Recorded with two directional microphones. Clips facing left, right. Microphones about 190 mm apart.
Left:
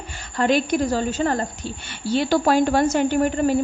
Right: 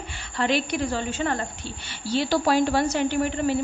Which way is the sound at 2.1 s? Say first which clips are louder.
Left 3 dB; 55° left (ahead or behind).